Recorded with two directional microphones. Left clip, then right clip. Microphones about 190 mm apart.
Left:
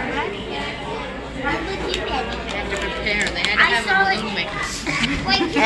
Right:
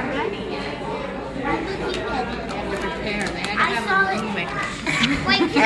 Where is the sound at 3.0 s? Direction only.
40° right (ahead or behind).